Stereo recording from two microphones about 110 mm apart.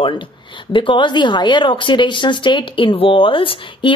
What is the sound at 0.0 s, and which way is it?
A woman's voice, 50° left (ahead or behind).